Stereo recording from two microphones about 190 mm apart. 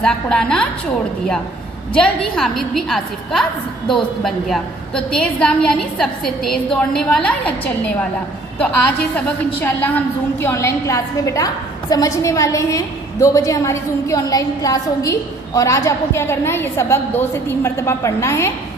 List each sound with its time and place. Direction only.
0.0 s a woman's voice: 5° left (ahead or behind)
1.9 s a woman's voice: 5° left (ahead or behind)
9.1 s a woman's voice: 10° left (ahead or behind)